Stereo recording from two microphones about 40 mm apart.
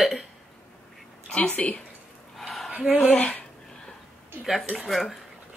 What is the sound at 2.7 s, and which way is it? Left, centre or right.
Speech, right.